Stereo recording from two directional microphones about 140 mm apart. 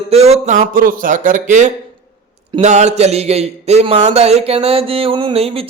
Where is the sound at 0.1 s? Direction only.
50° right (ahead or behind).